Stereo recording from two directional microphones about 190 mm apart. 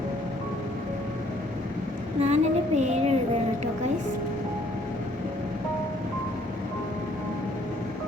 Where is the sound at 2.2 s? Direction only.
35° right (ahead or behind).